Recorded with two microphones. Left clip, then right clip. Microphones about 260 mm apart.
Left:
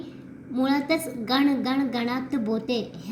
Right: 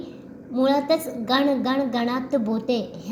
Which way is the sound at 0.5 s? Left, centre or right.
Left.